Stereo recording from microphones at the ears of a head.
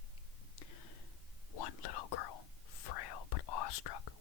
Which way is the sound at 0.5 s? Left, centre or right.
Left.